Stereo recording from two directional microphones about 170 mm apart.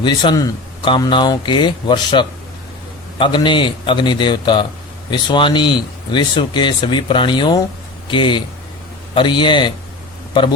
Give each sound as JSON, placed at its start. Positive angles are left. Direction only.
{"t": 0.0, "sound": "speech", "side_deg": 25}